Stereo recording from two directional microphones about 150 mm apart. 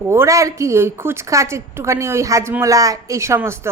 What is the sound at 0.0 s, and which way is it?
A woman's voice, 15° right (ahead or behind).